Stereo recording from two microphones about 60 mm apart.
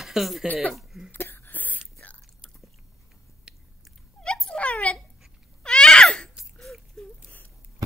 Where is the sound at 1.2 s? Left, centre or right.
Left.